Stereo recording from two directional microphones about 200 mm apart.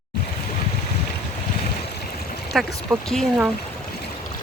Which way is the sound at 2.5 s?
Centre (ahead or behind).